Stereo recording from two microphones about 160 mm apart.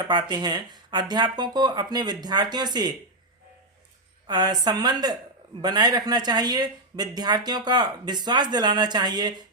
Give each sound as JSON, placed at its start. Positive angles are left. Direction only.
{"t": 0.1, "sound": "speech", "side_deg": -25}
{"t": 4.3, "sound": "speech", "side_deg": -25}